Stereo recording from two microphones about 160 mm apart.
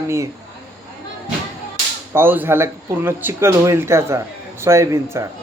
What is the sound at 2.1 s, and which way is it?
Speech, 15° right (ahead or behind).